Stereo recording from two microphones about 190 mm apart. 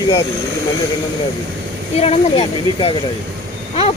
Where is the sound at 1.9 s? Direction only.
30° left (ahead or behind).